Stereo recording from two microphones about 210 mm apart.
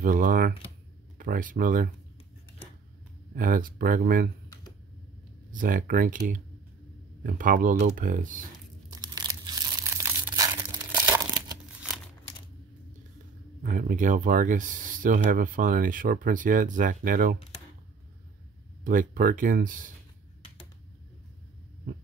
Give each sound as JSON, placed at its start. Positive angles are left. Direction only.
{"t": 0.0, "sound": "speech", "side_deg": -40}
{"t": 3.3, "sound": "speech", "side_deg": -40}
{"t": 5.5, "sound": "speech", "side_deg": -40}
{"t": 8.9, "sound": "a sound", "side_deg": -20}
{"t": 9.8, "sound": "crumpling", "side_deg": -10}
{"t": 13.6, "sound": "speech", "side_deg": -40}
{"t": 18.9, "sound": "speech", "side_deg": -40}